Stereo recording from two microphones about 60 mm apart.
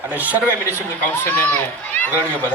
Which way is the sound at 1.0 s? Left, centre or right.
Left.